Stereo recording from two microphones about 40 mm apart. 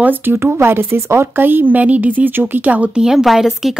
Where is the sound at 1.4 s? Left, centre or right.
Right.